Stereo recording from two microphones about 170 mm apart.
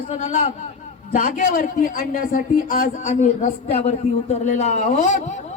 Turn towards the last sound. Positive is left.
turn(degrees=45)  # may be behind; listen again after turning